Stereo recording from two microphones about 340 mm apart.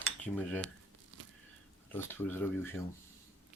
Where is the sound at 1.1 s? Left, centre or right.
Right.